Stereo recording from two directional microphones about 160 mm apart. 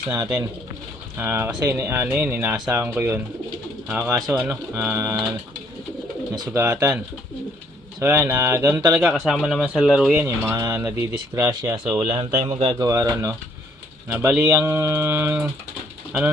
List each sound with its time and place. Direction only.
0.1 s speech: 20° right (ahead or behind)
6.3 s speech: 25° right (ahead or behind)
6.6 s speech: 10° right (ahead or behind)
8.0 s speech: 15° right (ahead or behind)
9.1 s speech: centre (ahead or behind)
12.2 s speech: 35° right (ahead or behind)
12.7 s speech: 20° right (ahead or behind)